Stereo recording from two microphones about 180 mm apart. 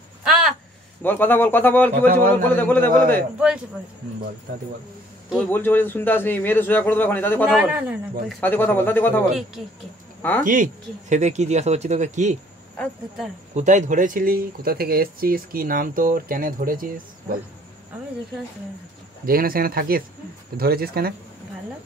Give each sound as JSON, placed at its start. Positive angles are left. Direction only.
{"t": 1.0, "sound": "a man's voice", "side_deg": 10}
{"t": 3.3, "sound": "speech", "side_deg": -5}
{"t": 5.5, "sound": "a man's voice", "side_deg": 10}
{"t": 7.4, "sound": "speech", "side_deg": -5}
{"t": 8.4, "sound": "a man's voice", "side_deg": 10}
{"t": 10.4, "sound": "speech", "side_deg": -45}
{"t": 12.7, "sound": "a man's voice", "side_deg": 5}
{"t": 13.6, "sound": "speech", "side_deg": -40}
{"t": 19.2, "sound": "speech", "side_deg": -55}